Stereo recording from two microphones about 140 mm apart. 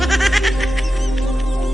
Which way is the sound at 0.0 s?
Centre (ahead or behind).